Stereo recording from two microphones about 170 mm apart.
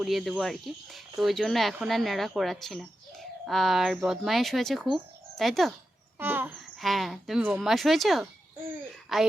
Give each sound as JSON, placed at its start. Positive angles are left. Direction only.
{"t": 0.0, "sound": "speech", "side_deg": 0}
{"t": 6.1, "sound": "speech", "side_deg": -10}
{"t": 6.7, "sound": "speech", "side_deg": 0}